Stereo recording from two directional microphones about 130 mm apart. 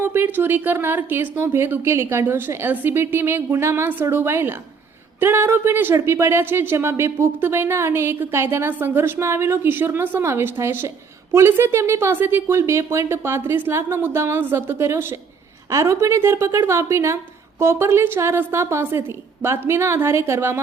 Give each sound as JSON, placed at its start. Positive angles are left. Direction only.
{"t": 0.0, "sound": "a woman's voice", "side_deg": -15}